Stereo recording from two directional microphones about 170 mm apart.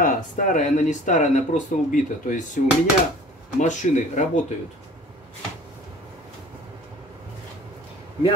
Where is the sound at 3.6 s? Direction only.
45° left (ahead or behind).